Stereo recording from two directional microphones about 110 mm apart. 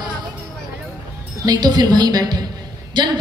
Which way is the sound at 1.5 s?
40° right (ahead or behind).